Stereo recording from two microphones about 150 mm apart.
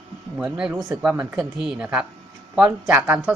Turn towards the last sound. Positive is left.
turn(degrees=-10)  # may be behind; listen again after turning